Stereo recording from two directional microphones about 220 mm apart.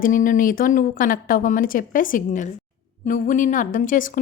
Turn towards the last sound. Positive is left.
turn(degrees=40)  # may be behind; listen again after turning